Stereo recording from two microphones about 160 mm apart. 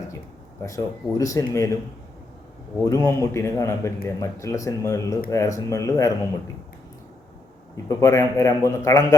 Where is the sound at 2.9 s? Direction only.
20° left (ahead or behind).